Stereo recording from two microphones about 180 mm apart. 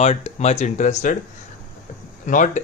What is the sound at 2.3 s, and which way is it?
Speech, 45° left (ahead or behind).